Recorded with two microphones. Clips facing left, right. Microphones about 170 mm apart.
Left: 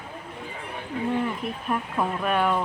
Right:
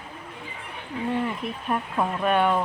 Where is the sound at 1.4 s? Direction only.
Centre (ahead or behind).